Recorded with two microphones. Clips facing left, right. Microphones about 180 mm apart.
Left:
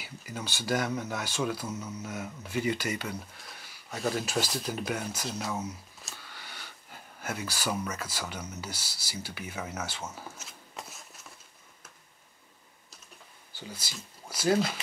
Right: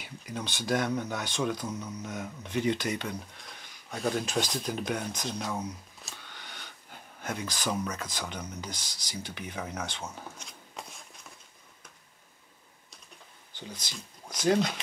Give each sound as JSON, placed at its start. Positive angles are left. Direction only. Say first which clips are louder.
{"t": 0.0, "sound": "speech", "louder": "right 2 dB", "side_deg": 5}
{"t": 13.5, "sound": "speech", "louder": "even", "side_deg": 5}